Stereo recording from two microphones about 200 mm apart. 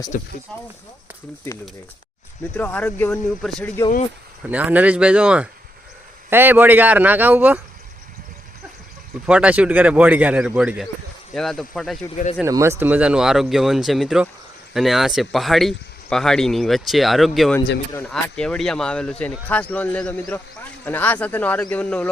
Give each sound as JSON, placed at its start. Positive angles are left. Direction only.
{"t": 0.1, "sound": "speech", "side_deg": 45}
{"t": 0.5, "sound": "speech", "side_deg": 5}
{"t": 2.6, "sound": "speech", "side_deg": 5}
{"t": 4.4, "sound": "a man's voice", "side_deg": -10}
{"t": 9.2, "sound": "a man's voice", "side_deg": -5}
{"t": 12.1, "sound": "speech", "side_deg": 35}
{"t": 12.4, "sound": "a man's voice", "side_deg": -15}